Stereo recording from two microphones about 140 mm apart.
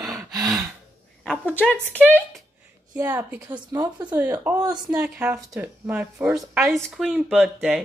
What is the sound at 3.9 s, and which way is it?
Speech, 10° right (ahead or behind).